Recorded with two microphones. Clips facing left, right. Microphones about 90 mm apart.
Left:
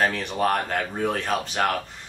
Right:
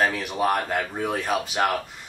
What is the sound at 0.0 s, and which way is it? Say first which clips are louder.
Speech: even; 5° right (ahead or behind).